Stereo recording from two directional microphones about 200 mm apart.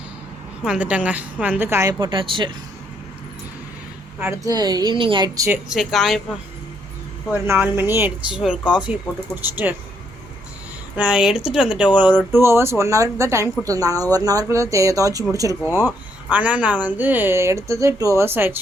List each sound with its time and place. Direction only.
0.6 s speech: 5° right (ahead or behind); by 2.5 s 25° right (ahead or behind)
4.2 s a woman's voice: 15° right (ahead or behind)
5.6 s speech: centre (ahead or behind)
7.4 s speech: 10° right (ahead or behind)
10.9 s speech: 5° right (ahead or behind)